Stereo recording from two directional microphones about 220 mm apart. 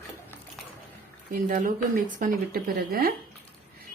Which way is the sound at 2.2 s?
40° right (ahead or behind).